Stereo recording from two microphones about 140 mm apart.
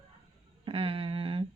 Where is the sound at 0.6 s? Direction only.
40° right (ahead or behind).